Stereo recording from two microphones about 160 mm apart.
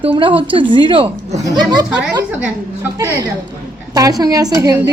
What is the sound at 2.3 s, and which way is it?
Speech, 5° right (ahead or behind).